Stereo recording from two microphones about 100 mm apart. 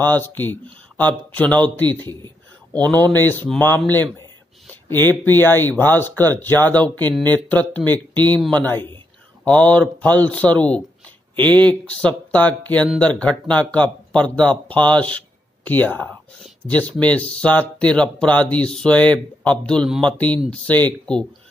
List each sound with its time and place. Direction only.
0.0 s speech: 20° left (ahead or behind)
4.9 s speech: 20° left (ahead or behind)